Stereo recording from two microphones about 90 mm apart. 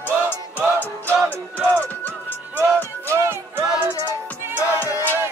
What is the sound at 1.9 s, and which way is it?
Music, 20° left (ahead or behind).